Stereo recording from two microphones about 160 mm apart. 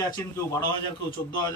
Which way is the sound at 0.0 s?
20° left (ahead or behind).